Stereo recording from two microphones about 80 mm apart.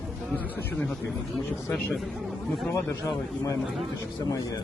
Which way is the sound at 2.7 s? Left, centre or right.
Left.